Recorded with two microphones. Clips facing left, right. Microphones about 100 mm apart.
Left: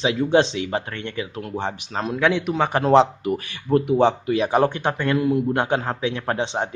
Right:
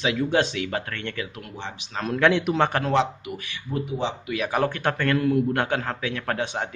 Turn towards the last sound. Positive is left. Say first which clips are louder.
# left 3 dB
turn(degrees=25)  # may be behind; listen again after turning